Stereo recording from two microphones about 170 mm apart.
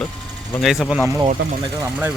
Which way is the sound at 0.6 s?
Centre (ahead or behind).